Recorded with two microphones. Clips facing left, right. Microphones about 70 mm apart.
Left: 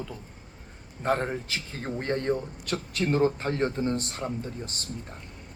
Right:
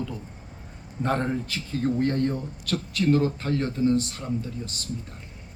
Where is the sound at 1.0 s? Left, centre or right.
Centre.